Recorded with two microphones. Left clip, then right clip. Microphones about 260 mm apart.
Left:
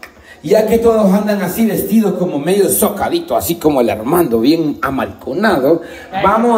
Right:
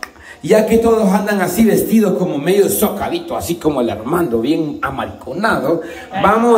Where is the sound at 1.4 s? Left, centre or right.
Centre.